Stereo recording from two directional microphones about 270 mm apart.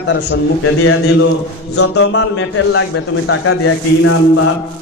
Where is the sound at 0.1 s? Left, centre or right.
Left.